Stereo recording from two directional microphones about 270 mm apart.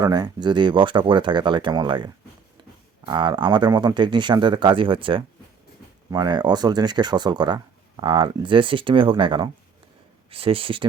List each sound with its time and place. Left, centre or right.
0.0 s speech: centre
3.1 s speech: centre